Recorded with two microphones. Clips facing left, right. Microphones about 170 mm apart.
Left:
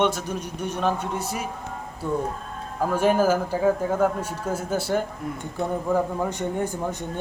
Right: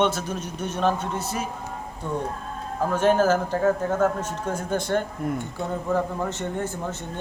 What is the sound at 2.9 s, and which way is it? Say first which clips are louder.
A man's voice: even; 10° left (ahead or behind).